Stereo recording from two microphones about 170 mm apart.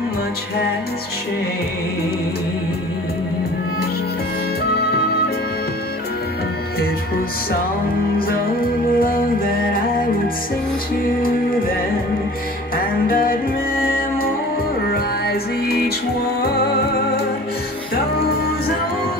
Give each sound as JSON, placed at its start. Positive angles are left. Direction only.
{"t": 8.2, "sound": "music", "side_deg": 60}
{"t": 14.9, "sound": "music", "side_deg": 65}